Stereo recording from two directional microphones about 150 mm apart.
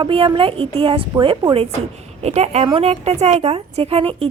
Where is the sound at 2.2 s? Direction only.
45° right (ahead or behind).